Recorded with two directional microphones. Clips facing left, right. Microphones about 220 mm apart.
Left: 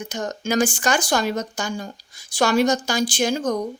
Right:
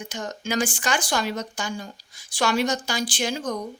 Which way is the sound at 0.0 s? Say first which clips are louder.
Left 4 dB; 45° left (ahead or behind).